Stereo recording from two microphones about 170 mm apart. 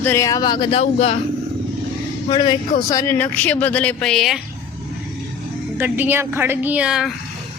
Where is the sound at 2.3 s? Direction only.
25° left (ahead or behind); by 4.4 s centre (ahead or behind).